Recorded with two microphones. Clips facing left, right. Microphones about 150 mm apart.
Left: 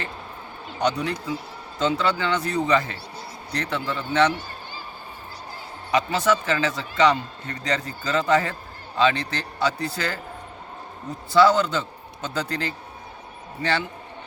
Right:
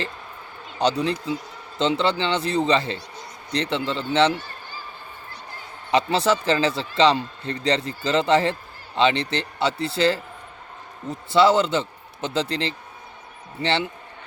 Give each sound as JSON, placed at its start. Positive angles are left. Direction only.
{"t": 0.9, "sound": "a man's voice", "side_deg": -30}
{"t": 5.9, "sound": "a man's voice", "side_deg": -30}
{"t": 11.3, "sound": "a man's voice", "side_deg": -25}